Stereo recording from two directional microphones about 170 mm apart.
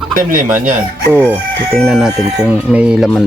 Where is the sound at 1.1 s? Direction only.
10° right (ahead or behind).